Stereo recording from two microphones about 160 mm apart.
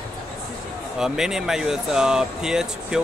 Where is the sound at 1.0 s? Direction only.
5° right (ahead or behind).